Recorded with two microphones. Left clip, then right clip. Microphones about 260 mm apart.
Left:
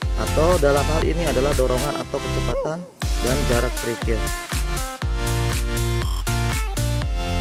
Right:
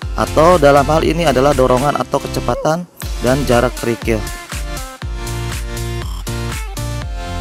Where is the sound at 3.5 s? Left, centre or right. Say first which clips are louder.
Right 8 dB; right.